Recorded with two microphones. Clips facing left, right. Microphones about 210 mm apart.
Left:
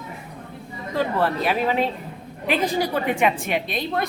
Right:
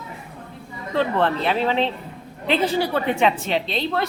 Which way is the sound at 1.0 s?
10° left (ahead or behind).